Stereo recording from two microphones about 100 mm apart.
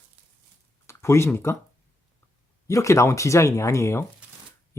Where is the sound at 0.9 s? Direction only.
25° left (ahead or behind).